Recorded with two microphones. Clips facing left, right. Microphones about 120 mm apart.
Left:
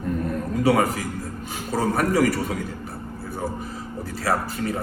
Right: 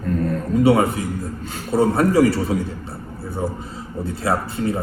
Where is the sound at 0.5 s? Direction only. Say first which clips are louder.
Right 4 dB; 25° right (ahead or behind).